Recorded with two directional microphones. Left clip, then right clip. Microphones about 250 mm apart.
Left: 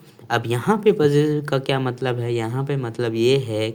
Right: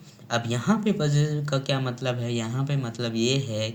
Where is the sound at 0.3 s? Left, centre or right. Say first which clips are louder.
Left 6 dB; left.